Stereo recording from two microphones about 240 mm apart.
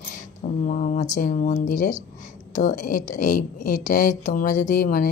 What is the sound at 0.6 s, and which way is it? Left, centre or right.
A woman's voice, left.